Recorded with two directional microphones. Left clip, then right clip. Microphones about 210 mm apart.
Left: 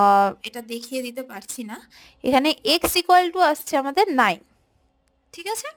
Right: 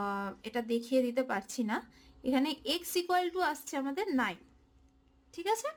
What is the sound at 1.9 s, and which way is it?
A woman's voice, 45° left (ahead or behind).